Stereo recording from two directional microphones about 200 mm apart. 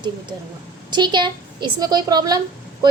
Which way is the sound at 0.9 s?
20° right (ahead or behind).